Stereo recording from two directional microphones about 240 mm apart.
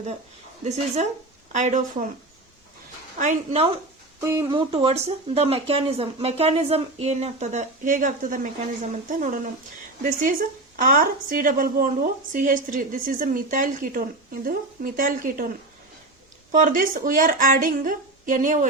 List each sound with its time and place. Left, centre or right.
1.5 s a woman's voice: right
3.2 s speech: right
4.2 s a woman's voice: centre; by 15.4 s right
16.5 s a woman's voice: right